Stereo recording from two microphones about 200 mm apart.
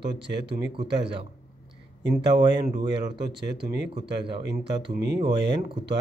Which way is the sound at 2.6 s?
20° right (ahead or behind).